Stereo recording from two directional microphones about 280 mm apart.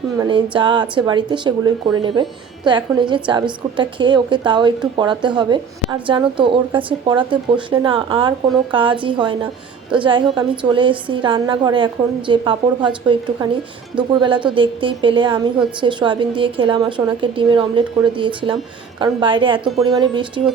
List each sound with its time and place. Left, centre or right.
0.2 s a woman's voice: centre